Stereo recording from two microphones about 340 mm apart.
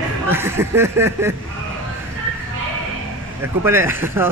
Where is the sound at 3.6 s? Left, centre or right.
Centre.